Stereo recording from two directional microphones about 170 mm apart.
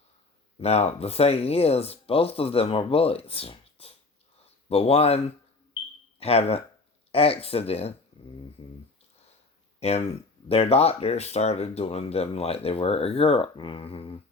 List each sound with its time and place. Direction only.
0.6 s speech: 40° left (ahead or behind)
9.8 s speech: 40° left (ahead or behind)